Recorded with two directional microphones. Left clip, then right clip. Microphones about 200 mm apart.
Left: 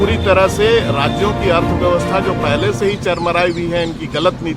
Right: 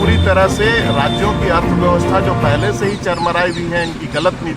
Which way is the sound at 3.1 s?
30° left (ahead or behind).